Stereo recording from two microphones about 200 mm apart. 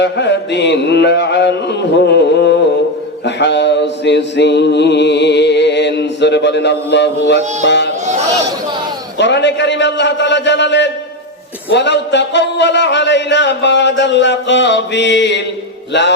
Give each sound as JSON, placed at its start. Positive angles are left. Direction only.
{"t": 0.0, "sound": "mantra", "side_deg": 60}
{"t": 7.6, "sound": "music", "side_deg": 60}
{"t": 9.1, "sound": "a sound", "side_deg": 60}
{"t": 11.7, "sound": "mantra", "side_deg": 60}